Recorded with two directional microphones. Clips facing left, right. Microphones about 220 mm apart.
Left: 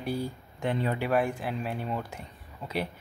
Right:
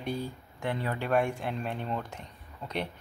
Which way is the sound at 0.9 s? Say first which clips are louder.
Left 1 dB; 5° left (ahead or behind).